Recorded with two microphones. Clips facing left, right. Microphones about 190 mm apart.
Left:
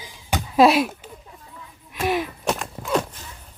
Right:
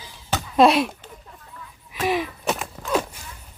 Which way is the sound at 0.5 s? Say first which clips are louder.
Even; centre (ahead or behind).